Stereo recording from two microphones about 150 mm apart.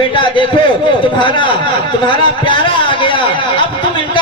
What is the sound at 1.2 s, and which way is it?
A man's voice, 35° left (ahead or behind).